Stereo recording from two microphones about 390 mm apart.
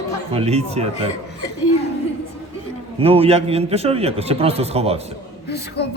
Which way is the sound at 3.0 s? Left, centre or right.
Centre.